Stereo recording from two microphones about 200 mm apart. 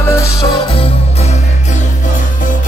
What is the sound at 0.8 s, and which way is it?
Music, 35° left (ahead or behind).